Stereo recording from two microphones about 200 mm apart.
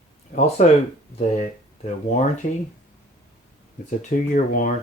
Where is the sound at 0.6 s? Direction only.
35° left (ahead or behind).